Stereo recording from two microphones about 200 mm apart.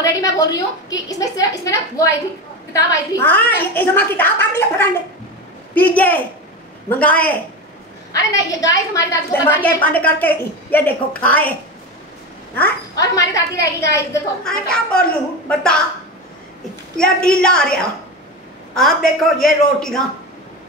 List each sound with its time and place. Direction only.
0.0 s a woman's voice: 15° left (ahead or behind)
12.5 s a woman's voice: 15° left (ahead or behind)
14.4 s a woman's voice: 5° left (ahead or behind)
16.9 s a woman's voice: 5° left (ahead or behind)
18.8 s a woman's voice: centre (ahead or behind)